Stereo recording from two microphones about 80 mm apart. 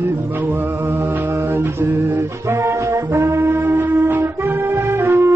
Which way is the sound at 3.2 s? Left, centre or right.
Right.